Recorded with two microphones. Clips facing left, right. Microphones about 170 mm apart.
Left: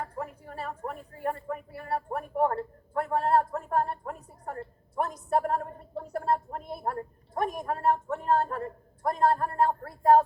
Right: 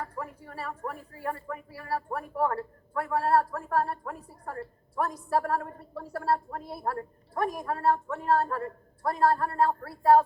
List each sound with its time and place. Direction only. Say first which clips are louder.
0.0 s a woman's voice: left 1 dB; 30° left (ahead or behind)